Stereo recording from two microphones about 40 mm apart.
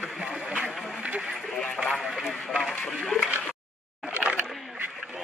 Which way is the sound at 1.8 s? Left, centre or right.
Centre.